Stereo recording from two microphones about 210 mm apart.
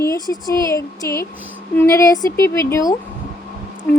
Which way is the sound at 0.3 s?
10° left (ahead or behind).